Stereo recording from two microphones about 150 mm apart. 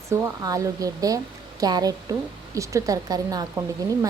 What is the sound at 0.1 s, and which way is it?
A woman's voice, 20° right (ahead or behind).